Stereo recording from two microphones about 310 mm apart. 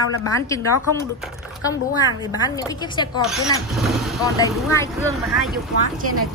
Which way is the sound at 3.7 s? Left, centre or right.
Centre.